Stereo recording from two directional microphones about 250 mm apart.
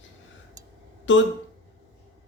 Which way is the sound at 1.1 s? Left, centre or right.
Left.